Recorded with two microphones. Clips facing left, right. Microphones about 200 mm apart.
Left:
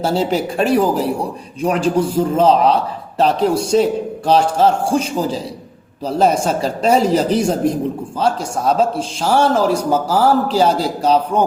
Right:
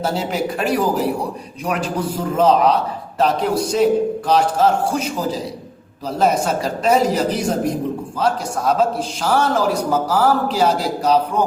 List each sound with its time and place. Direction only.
0.0 s a man's voice: 30° left (ahead or behind)